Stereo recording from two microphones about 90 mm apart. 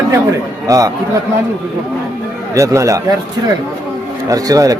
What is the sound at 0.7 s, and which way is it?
Speech, 35° right (ahead or behind).